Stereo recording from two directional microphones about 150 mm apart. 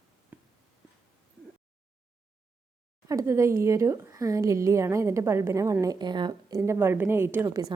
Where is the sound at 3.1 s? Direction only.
20° right (ahead or behind).